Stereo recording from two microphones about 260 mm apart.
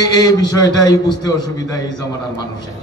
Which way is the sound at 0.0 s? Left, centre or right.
Centre.